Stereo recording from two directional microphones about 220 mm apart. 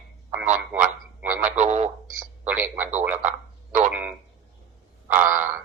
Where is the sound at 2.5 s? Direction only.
5° right (ahead or behind).